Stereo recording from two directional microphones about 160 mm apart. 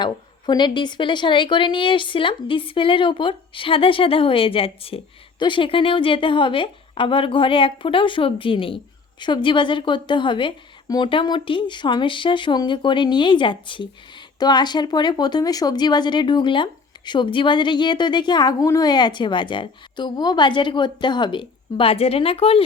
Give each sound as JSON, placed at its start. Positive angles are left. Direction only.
{"t": 0.0, "sound": "a woman's voice", "side_deg": 30}